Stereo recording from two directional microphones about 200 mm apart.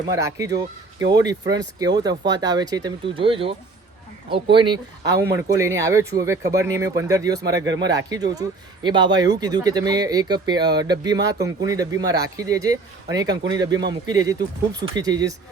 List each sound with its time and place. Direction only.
0.2 s speech: 15° right (ahead or behind)
4.5 s speech: 20° right (ahead or behind)